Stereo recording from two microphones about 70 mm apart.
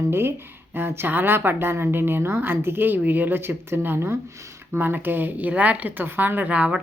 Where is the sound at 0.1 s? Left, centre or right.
Right.